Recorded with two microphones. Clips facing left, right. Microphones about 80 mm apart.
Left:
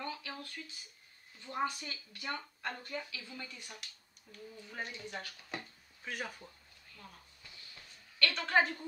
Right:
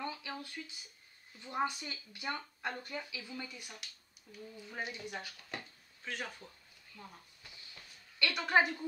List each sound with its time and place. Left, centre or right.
0.0 s a sound: centre
1.4 s a woman's voice: centre
6.0 s speech: centre
8.2 s a woman's voice: centre